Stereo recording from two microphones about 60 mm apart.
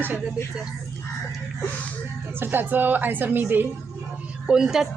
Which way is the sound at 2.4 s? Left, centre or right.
Right.